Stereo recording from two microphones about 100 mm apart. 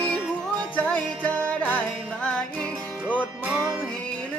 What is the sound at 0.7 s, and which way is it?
Music, 15° left (ahead or behind).